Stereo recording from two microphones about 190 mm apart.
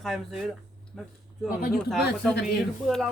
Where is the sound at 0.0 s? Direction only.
Centre (ahead or behind).